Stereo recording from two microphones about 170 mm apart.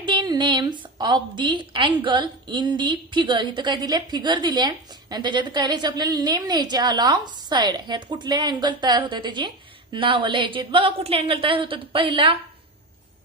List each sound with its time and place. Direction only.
0.0 s a woman's voice: 25° right (ahead or behind)